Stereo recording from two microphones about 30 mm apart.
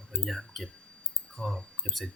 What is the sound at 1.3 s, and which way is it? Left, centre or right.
Speech, centre.